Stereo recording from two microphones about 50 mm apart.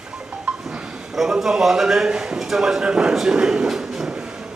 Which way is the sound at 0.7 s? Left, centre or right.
Centre.